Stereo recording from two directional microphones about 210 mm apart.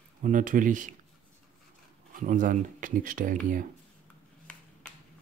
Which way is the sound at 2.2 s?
40° right (ahead or behind).